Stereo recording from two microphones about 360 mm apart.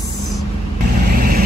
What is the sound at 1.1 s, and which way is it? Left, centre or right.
Vehicle, right.